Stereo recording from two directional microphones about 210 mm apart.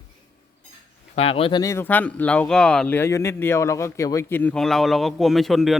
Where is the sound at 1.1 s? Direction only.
25° left (ahead or behind).